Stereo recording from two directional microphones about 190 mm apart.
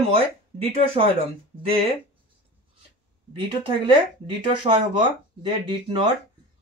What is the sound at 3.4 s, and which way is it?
Speech, 25° right (ahead or behind).